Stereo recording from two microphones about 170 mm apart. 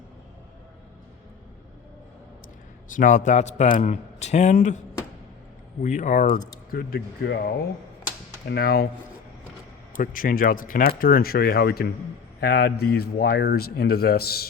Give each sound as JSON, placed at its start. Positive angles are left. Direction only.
{"t": 2.9, "sound": "speech", "side_deg": 50}
{"t": 5.8, "sound": "speech", "side_deg": 45}
{"t": 6.7, "sound": "a man's voice", "side_deg": 65}
{"t": 10.0, "sound": "a man's voice", "side_deg": 55}